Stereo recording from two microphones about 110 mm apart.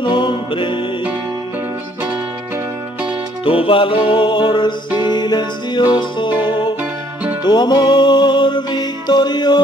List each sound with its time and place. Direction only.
0.0 s music: 45° left (ahead or behind)
3.4 s music: 55° left (ahead or behind)
6.3 s music: 15° right (ahead or behind)
7.4 s music: 40° left (ahead or behind)